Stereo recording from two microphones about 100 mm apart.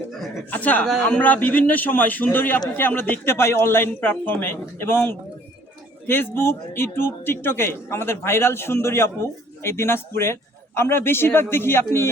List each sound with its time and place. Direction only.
0.5 s a man's voice: 15° left (ahead or behind)